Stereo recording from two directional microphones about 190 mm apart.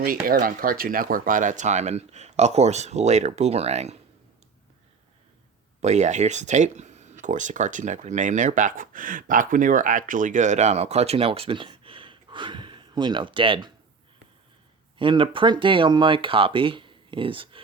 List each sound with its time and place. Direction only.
0.0 s speech: 50° right (ahead or behind)
5.8 s speech: 35° right (ahead or behind)
14.9 s speech: 25° right (ahead or behind)